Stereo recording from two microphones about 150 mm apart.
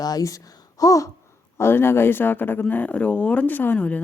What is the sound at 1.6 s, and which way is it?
Speech, 15° left (ahead or behind).